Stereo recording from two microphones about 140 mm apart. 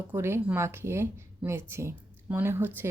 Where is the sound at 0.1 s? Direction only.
15° right (ahead or behind).